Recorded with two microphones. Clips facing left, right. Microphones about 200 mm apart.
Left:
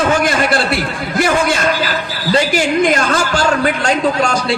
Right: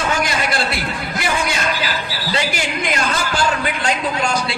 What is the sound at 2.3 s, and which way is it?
A man's voice, 45° left (ahead or behind).